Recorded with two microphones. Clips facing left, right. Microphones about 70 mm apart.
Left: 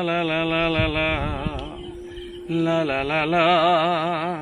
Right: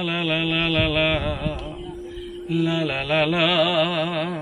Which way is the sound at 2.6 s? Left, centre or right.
Left.